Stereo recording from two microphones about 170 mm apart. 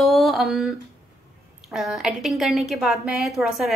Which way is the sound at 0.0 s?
Centre (ahead or behind).